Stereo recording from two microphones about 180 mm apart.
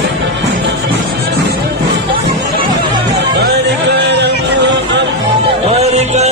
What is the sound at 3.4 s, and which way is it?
Music, 70° right (ahead or behind).